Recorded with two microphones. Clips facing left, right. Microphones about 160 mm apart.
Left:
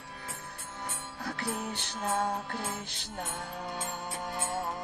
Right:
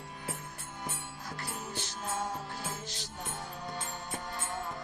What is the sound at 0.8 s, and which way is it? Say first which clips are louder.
Music: left 3 dB; 65° left (ahead or behind).